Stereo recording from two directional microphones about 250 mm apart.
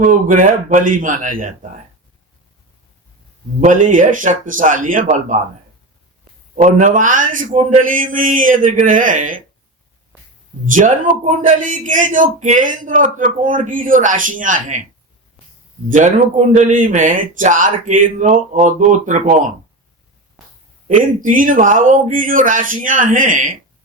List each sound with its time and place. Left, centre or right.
0.0 s a man's voice: right
3.8 s a man's voice: right
6.6 s a man's voice: right
10.7 s a man's voice: right
16.0 s a man's voice: right
21.0 s a man's voice: right